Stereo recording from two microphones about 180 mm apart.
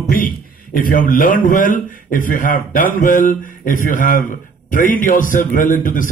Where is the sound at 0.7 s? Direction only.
50° left (ahead or behind).